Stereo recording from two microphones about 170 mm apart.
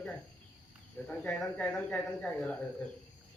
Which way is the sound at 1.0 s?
5° left (ahead or behind).